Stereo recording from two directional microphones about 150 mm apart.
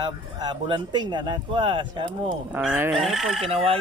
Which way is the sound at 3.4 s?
40° right (ahead or behind).